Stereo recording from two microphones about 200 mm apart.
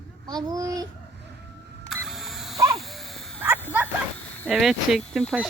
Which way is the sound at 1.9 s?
Centre (ahead or behind).